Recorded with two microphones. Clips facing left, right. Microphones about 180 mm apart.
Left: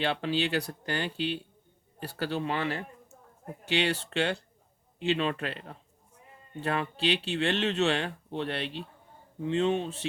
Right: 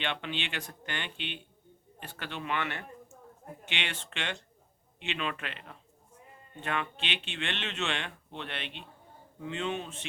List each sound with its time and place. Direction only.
0.0 s speech: 35° left (ahead or behind)